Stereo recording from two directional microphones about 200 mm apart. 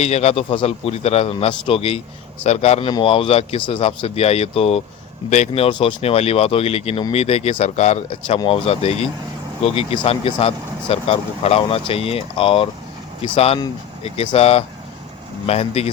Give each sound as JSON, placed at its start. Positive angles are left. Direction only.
{"t": 0.0, "sound": "a man's voice", "side_deg": 35}